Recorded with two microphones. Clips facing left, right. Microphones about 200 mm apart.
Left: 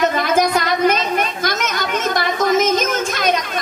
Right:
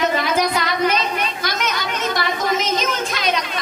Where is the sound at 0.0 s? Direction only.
50° left (ahead or behind).